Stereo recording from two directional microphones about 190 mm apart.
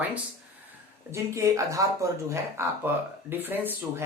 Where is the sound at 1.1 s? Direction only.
15° right (ahead or behind).